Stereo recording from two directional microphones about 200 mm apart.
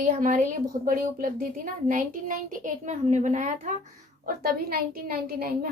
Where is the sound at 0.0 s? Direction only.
45° right (ahead or behind).